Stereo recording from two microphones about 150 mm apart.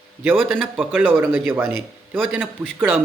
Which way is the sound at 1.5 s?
15° right (ahead or behind).